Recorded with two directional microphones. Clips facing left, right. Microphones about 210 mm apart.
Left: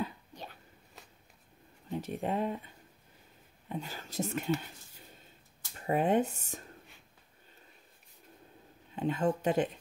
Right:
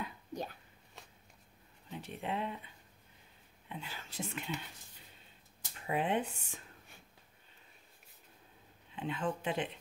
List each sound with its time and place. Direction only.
0.3 s a sound: 45° right (ahead or behind)
1.9 s speech: 45° left (ahead or behind)
5.8 s speech: 45° left (ahead or behind)
8.9 s speech: 45° left (ahead or behind)